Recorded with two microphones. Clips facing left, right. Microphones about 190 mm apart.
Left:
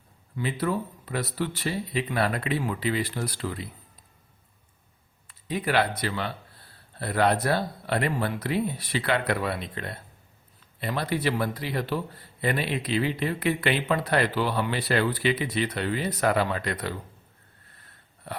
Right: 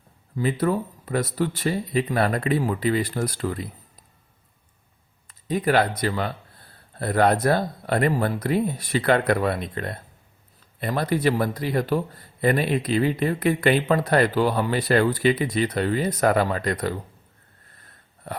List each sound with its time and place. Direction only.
0.3 s a man's voice: 45° right (ahead or behind)
5.3 s a man's voice: 45° right (ahead or behind)
18.3 s a sound: 45° right (ahead or behind)